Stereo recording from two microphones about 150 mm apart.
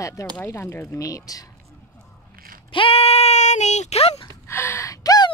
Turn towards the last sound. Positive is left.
turn(degrees=25)  # may be behind; listen again after turning